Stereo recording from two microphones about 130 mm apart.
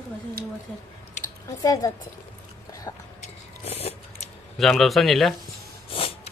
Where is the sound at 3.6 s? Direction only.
55° left (ahead or behind).